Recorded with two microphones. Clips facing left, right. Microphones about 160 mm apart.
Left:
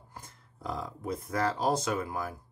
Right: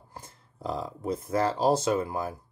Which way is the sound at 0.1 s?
30° right (ahead or behind).